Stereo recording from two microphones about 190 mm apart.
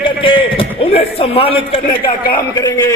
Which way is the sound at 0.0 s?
25° left (ahead or behind).